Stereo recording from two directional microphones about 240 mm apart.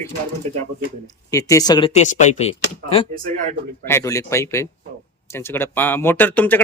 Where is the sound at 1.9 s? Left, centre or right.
Left.